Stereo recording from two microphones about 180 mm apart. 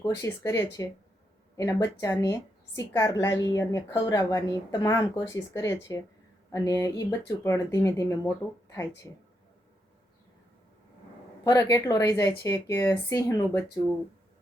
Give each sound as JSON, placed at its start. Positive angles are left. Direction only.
{"t": 0.3, "sound": "a woman's voice", "side_deg": 15}
{"t": 11.4, "sound": "a woman's voice", "side_deg": 20}